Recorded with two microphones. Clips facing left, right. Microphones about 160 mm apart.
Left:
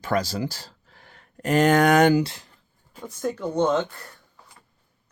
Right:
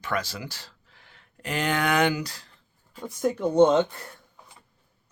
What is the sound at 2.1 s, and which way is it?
Speech, 25° left (ahead or behind).